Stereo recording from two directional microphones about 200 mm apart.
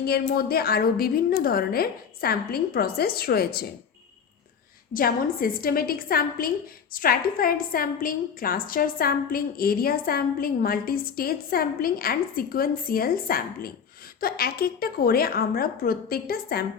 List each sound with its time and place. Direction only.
0.0 s a woman's voice: 50° left (ahead or behind)
4.9 s a woman's voice: 45° left (ahead or behind)